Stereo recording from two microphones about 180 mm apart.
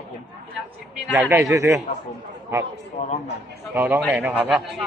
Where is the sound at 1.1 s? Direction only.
10° right (ahead or behind).